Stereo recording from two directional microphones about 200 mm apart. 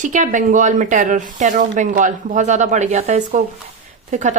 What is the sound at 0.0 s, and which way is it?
A woman's voice, 40° right (ahead or behind).